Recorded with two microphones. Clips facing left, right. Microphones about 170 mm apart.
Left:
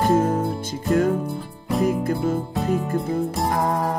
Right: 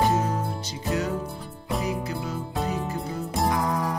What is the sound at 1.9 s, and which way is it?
Music, 50° left (ahead or behind).